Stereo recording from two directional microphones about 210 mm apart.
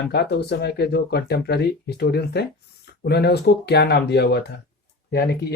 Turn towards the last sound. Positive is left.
turn(degrees=50)  # may be behind; listen again after turning